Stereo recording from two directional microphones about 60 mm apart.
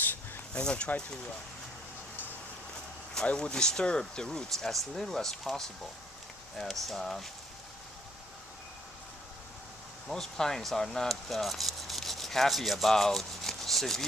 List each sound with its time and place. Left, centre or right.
0.0 s a sound: left
0.5 s speech: centre
3.3 s speech: centre
6.8 s speech: centre
10.1 s speech: centre